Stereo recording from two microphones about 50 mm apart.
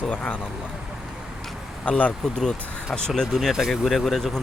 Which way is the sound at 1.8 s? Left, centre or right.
Left.